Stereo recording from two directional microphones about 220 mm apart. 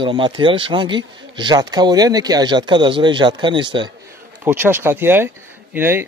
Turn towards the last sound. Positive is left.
turn(degrees=-10)  # may be behind; listen again after turning